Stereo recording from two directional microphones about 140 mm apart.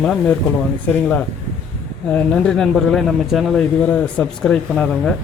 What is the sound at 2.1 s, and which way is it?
A man's voice, 5° left (ahead or behind).